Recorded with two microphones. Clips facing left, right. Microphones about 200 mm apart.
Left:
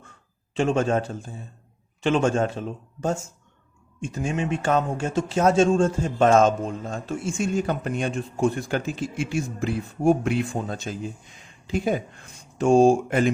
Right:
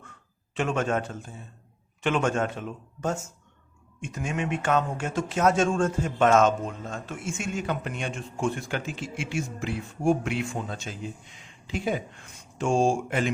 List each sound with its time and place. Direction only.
0.5 s speech: 30° left (ahead or behind)
12.5 s speech: 40° left (ahead or behind)